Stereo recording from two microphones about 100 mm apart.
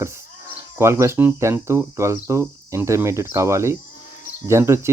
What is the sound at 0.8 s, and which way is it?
Speech, 30° right (ahead or behind).